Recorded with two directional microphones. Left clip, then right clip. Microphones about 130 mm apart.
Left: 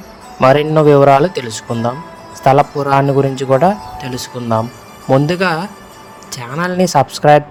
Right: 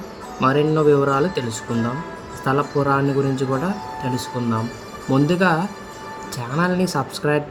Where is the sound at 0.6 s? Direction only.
50° left (ahead or behind).